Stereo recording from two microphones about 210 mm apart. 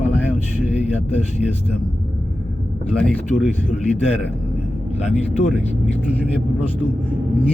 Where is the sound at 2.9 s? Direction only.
5° left (ahead or behind).